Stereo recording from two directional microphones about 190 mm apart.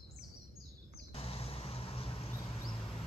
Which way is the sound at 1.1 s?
30° left (ahead or behind).